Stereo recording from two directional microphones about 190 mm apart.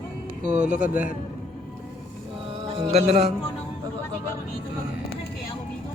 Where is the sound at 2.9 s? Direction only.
35° right (ahead or behind).